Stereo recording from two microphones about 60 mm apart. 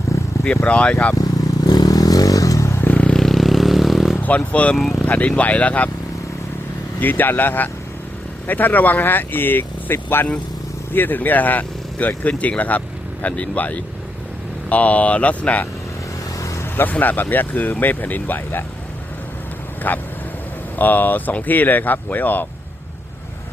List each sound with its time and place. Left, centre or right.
0.4 s speech: left
1.1 s vehicle: left
2.8 s vehicle: left
3.1 s vehicle: centre
4.2 s speech: left
4.8 s speech: centre
5.0 s speech: left
7.0 s speech: left
16.4 s vehicle: left
16.9 s speech: left
19.9 s speech: left